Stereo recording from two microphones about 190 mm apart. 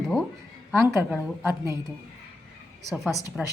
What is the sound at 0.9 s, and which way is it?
Speech, 10° right (ahead or behind).